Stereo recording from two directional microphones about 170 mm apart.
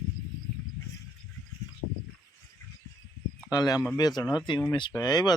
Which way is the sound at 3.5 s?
20° left (ahead or behind).